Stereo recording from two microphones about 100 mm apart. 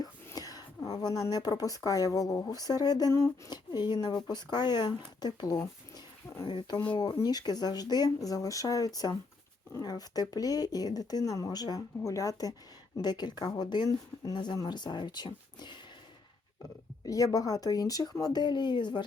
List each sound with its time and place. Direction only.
0.3 s a sound: 40° left (ahead or behind)
0.9 s speech: 40° left (ahead or behind)
3.1 s speech: 30° left (ahead or behind)
3.5 s speech: 45° left (ahead or behind)
6.4 s speech: 55° left (ahead or behind)
17.1 s speech: 35° left (ahead or behind)